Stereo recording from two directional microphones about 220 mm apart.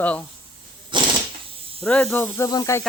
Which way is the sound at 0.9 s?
20° right (ahead or behind).